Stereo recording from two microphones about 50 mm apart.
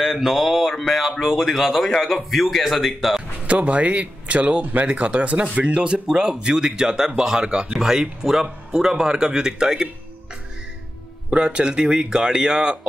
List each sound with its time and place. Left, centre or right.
0.0 s a man's voice: centre
3.4 s speech: right
11.2 s speech: centre